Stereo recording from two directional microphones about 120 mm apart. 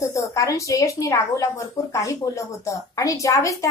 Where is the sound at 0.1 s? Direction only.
25° left (ahead or behind).